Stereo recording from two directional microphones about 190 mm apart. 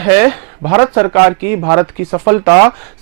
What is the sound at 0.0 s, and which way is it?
Speech, 15° right (ahead or behind).